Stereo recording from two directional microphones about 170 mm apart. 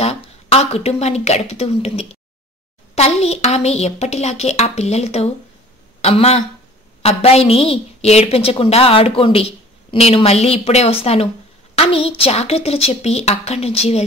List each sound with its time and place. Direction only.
0.0 s a woman's voice: 40° left (ahead or behind)